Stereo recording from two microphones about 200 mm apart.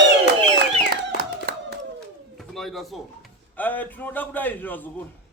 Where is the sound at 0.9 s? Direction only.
50° right (ahead or behind).